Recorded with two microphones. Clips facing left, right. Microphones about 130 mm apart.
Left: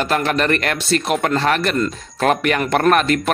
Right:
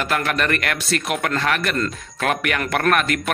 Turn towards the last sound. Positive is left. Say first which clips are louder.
# left 4 dB
turn(degrees=30)  # may be behind; listen again after turning